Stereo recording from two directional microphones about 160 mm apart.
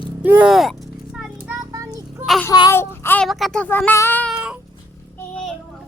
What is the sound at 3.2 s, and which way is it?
Speech, 5° left (ahead or behind).